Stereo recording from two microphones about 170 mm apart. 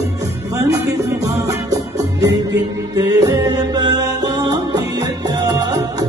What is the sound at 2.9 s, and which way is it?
Music, 20° right (ahead or behind).